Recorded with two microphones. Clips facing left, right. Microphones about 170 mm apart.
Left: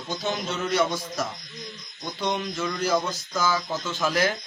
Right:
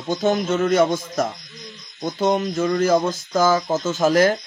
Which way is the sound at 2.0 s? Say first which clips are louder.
Right 8 dB; 45° right (ahead or behind).